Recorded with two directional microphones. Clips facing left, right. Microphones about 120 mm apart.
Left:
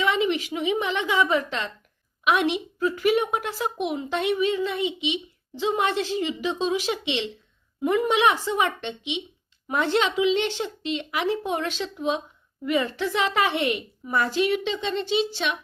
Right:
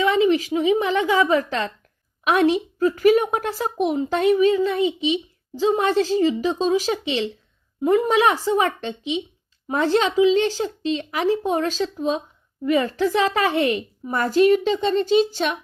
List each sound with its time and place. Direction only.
0.0 s a woman's voice: 35° right (ahead or behind)